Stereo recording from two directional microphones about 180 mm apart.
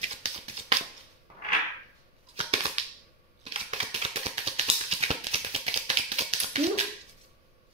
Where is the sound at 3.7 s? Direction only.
35° right (ahead or behind).